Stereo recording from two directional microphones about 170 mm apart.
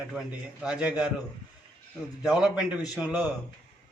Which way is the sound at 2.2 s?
5° right (ahead or behind).